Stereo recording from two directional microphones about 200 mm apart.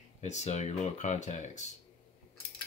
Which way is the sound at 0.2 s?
35° left (ahead or behind).